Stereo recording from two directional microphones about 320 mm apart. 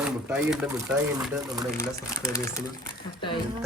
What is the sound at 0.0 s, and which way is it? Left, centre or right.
Speech, centre.